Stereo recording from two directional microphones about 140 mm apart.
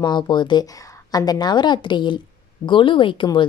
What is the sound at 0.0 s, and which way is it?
Speech, 35° left (ahead or behind).